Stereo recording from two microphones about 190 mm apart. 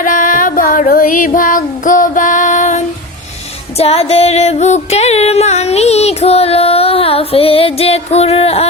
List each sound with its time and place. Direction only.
0.0 s music: 45° left (ahead or behind)